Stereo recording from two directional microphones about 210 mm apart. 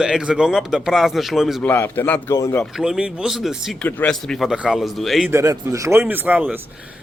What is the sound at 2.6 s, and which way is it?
Speech, centre (ahead or behind).